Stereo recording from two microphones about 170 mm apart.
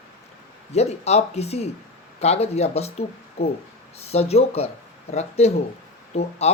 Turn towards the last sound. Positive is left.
turn(degrees=40)  # may be behind; listen again after turning